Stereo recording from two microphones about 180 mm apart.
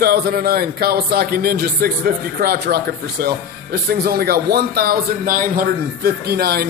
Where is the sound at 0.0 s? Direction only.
60° right (ahead or behind).